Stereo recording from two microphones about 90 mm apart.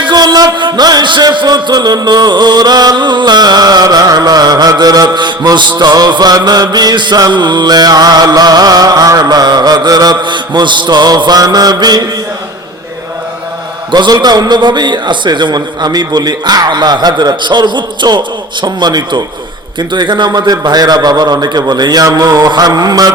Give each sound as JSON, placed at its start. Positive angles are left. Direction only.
{"t": 0.0, "sound": "music", "side_deg": -50}
{"t": 13.9, "sound": "music", "side_deg": -50}